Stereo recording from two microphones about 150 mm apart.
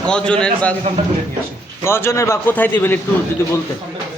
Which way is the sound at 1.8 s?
15° left (ahead or behind).